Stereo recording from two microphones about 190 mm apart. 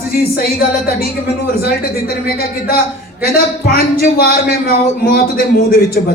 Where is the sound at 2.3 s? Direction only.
50° left (ahead or behind).